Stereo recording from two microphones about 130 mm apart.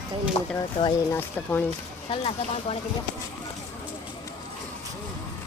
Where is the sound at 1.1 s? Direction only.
20° left (ahead or behind).